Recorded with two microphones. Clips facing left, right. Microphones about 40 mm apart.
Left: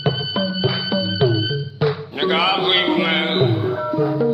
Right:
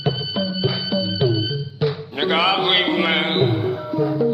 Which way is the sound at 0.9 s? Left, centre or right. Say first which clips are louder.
Left 2 dB; left.